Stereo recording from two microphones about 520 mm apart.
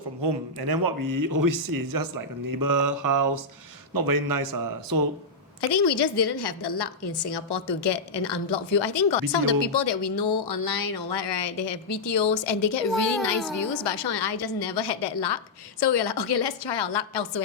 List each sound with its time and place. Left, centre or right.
0.2 s speech: right
5.5 s a woman's voice: left
12.9 s speech: centre
13.6 s a woman's voice: left